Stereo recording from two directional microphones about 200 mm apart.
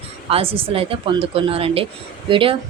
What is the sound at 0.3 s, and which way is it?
A woman's voice, 30° right (ahead or behind).